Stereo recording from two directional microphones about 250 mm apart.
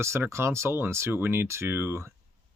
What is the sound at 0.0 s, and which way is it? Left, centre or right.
Speech, centre.